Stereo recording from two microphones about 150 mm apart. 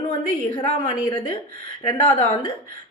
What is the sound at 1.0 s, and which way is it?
A woman's voice, 30° left (ahead or behind).